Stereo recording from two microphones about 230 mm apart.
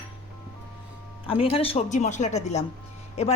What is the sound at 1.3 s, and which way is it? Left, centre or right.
Speech, left.